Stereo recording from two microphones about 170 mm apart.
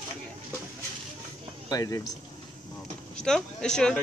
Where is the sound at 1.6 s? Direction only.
20° left (ahead or behind).